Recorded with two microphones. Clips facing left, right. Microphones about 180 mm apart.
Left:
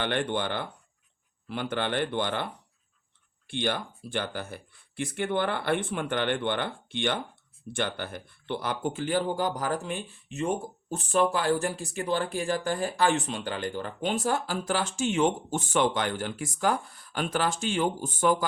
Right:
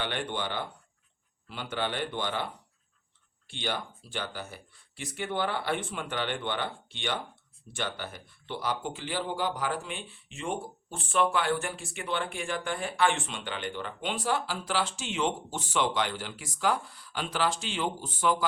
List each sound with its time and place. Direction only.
0.0 s speech: 50° left (ahead or behind)